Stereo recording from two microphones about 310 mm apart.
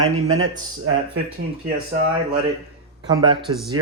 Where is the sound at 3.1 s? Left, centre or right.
Centre.